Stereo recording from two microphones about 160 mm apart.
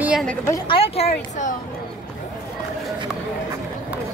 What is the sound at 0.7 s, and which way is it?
Speech, 40° left (ahead or behind).